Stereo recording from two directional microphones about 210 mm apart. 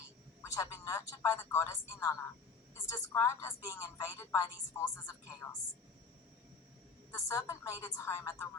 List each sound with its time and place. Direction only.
0.4 s a man's voice: 15° left (ahead or behind)
3.2 s a woman's voice: 15° left (ahead or behind)
7.1 s a woman's voice: 15° left (ahead or behind)